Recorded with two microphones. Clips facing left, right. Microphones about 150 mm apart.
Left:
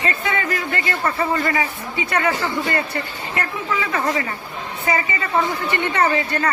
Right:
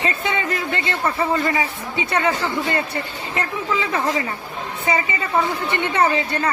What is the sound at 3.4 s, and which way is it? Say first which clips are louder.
A man's voice: right 1 dB; 20° right (ahead or behind).